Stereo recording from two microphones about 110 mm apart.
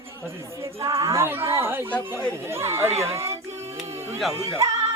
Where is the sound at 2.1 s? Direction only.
20° right (ahead or behind).